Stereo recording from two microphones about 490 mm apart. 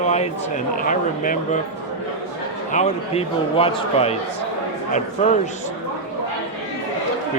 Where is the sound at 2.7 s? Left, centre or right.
Centre.